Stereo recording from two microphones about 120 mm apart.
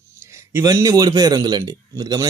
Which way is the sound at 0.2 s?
25° right (ahead or behind).